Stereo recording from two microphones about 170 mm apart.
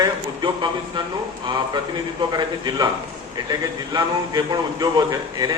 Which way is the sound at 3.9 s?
25° right (ahead or behind).